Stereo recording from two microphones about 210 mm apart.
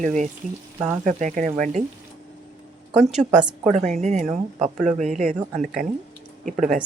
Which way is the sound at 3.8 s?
35° right (ahead or behind).